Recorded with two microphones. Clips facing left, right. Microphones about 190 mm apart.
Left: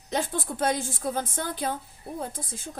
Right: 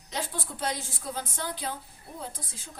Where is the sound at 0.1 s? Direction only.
50° left (ahead or behind).